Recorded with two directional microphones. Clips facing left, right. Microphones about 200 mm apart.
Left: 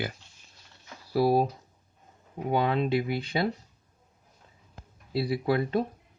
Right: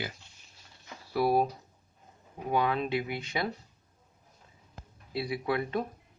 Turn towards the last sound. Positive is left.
turn(degrees=30)  # may be behind; listen again after turning